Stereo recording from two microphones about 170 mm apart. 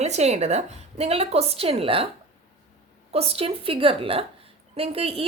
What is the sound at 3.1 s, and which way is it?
A woman's voice, 35° right (ahead or behind).